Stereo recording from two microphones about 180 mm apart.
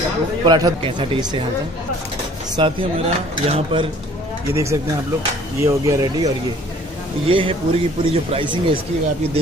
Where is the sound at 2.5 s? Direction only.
30° right (ahead or behind).